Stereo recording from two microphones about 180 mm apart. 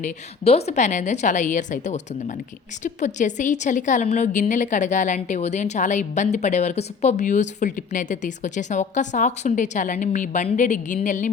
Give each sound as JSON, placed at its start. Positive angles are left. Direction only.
{"t": 0.0, "sound": "a woman's voice", "side_deg": 35}